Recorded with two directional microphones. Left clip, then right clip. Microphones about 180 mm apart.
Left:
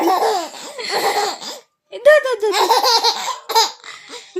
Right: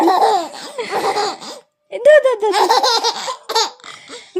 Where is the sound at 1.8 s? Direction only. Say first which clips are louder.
Right 2 dB; 65° right (ahead or behind).